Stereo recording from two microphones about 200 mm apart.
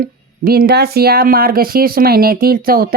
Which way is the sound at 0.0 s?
45° right (ahead or behind).